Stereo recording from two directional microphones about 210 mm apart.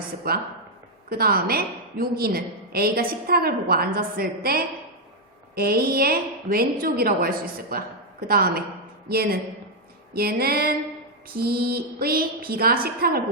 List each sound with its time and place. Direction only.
1.1 s a woman's voice: 45° right (ahead or behind)